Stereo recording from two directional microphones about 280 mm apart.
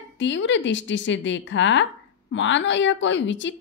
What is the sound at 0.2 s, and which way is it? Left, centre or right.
Speech, left.